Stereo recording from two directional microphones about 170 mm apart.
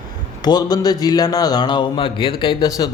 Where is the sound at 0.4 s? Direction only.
25° left (ahead or behind).